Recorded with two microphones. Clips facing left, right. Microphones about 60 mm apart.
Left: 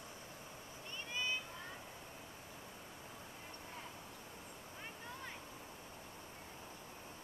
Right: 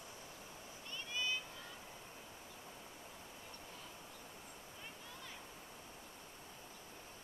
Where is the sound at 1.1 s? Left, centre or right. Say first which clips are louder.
Even; left.